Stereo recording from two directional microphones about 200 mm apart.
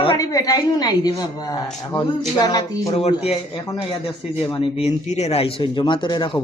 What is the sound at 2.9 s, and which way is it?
A man's voice, 30° left (ahead or behind).